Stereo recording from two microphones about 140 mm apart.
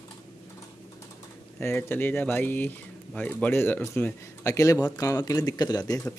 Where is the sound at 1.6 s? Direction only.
15° left (ahead or behind).